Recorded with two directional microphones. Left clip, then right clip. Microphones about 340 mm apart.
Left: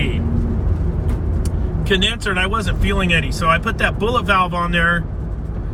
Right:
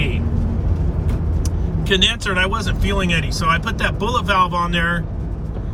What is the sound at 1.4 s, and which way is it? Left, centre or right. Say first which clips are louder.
Speech: even; centre.